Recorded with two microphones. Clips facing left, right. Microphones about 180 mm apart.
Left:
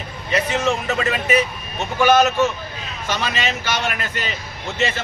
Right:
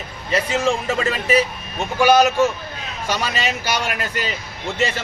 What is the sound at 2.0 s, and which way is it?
Speech, 10° right (ahead or behind).